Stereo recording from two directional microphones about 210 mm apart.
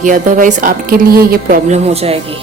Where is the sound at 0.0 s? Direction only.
40° right (ahead or behind).